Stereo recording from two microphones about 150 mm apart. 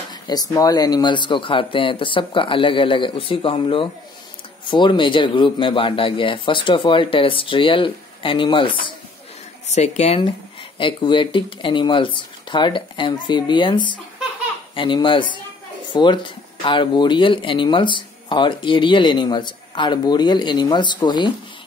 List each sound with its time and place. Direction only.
0.1 s speech: 25° left (ahead or behind)
9.7 s speech: 50° left (ahead or behind); by 21.3 s 30° left (ahead or behind)